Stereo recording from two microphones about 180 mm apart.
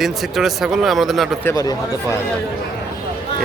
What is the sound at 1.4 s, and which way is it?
Speech, 20° left (ahead or behind).